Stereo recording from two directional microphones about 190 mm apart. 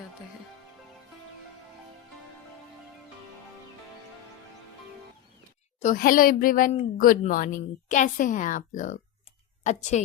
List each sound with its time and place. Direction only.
5.8 s a woman's voice: 45° left (ahead or behind)